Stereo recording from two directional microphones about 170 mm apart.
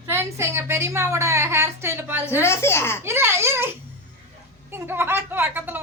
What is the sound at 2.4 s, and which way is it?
Speech, 15° left (ahead or behind).